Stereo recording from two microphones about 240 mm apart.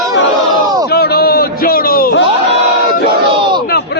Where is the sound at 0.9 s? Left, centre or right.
Left.